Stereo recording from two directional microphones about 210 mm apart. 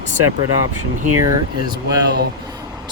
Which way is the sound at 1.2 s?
20° right (ahead or behind).